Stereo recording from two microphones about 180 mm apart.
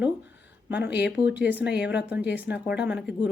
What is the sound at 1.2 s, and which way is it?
Speech, 10° right (ahead or behind).